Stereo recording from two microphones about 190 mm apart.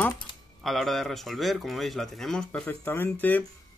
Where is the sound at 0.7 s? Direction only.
Centre (ahead or behind).